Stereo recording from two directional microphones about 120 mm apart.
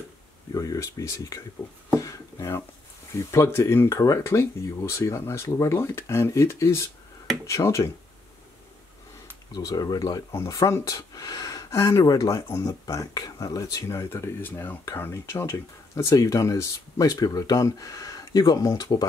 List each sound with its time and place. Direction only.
0.6 s speech: 30° left (ahead or behind)
2.0 s a sound: 25° left (ahead or behind)
3.2 s speech: 25° left (ahead or behind)
9.5 s speech: 30° left (ahead or behind)